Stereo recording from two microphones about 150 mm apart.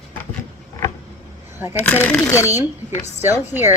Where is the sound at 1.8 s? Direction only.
10° left (ahead or behind).